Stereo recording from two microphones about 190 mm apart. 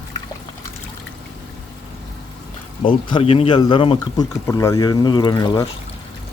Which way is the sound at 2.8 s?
30° left (ahead or behind).